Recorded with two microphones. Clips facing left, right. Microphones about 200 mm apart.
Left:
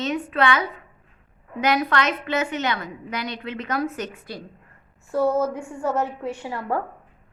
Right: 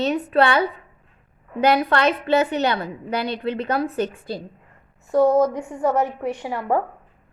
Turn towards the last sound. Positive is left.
turn(degrees=-20)  # may be behind; listen again after turning